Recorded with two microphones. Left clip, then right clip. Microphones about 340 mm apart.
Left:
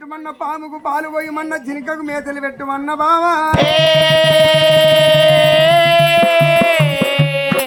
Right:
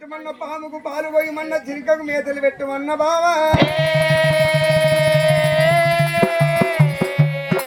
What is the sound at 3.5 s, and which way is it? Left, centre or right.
Music, left.